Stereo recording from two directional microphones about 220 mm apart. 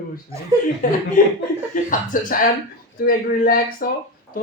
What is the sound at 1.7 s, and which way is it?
Speech, 40° left (ahead or behind).